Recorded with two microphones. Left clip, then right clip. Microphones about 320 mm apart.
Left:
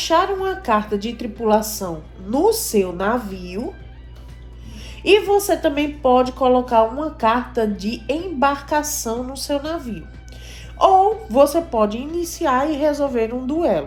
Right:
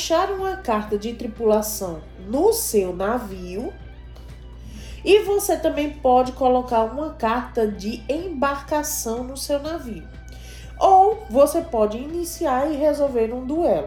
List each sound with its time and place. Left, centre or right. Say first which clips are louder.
0.0 s a woman's voice: left 3 dB; left
5.0 s a woman's voice: left 2 dB; left